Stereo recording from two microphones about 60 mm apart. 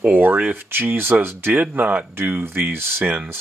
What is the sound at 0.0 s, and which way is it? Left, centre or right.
Speech, right.